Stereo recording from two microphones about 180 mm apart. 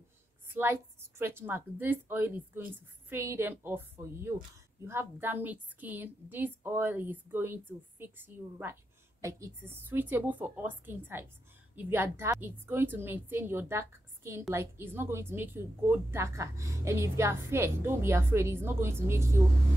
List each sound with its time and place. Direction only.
0.6 s a woman's voice: 15° right (ahead or behind)